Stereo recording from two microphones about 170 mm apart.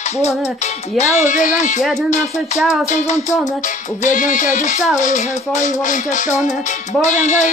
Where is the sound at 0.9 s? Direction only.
45° left (ahead or behind).